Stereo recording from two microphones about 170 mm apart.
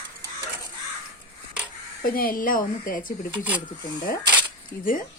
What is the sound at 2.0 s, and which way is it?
A woman's voice, 60° left (ahead or behind).